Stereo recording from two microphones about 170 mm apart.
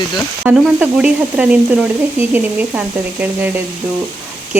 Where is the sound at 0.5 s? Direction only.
5° right (ahead or behind).